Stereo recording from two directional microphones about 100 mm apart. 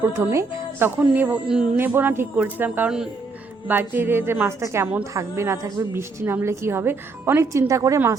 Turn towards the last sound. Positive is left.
turn(degrees=-35)  # may be behind; listen again after turning